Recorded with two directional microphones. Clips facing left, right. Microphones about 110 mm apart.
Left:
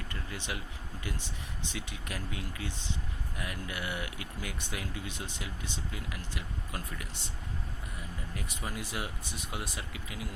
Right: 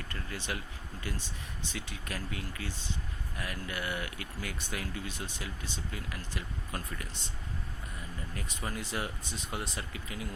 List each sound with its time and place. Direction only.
0.1 s speech: 15° left (ahead or behind)
1.7 s speech: 15° left (ahead or behind)
8.4 s speech: 10° left (ahead or behind)